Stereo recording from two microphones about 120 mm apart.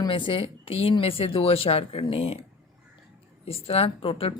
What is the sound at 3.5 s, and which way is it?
Speech, 55° left (ahead or behind).